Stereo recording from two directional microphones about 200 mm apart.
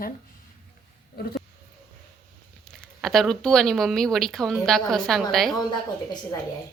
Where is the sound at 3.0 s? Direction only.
Centre (ahead or behind).